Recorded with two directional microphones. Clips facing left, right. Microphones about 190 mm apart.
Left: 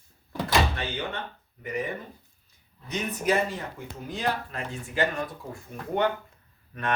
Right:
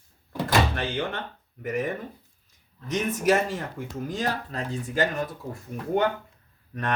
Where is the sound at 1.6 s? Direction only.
45° right (ahead or behind).